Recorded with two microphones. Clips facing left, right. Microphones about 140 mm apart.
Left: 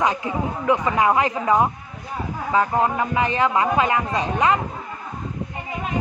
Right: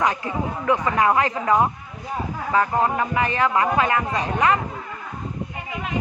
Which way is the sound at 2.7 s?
15° left (ahead or behind).